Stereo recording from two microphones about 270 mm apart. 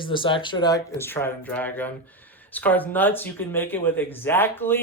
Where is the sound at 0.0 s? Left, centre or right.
Centre.